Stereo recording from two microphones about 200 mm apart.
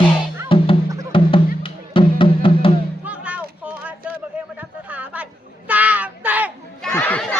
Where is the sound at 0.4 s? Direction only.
25° left (ahead or behind).